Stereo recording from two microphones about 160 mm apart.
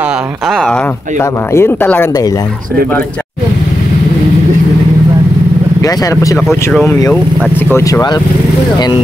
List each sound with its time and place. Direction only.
0.5 s speech: centre (ahead or behind)
1.5 s speech: 15° left (ahead or behind)
5.8 s speech: 20° left (ahead or behind)
6.3 s speech: centre (ahead or behind)
7.7 s speech: 20° left (ahead or behind)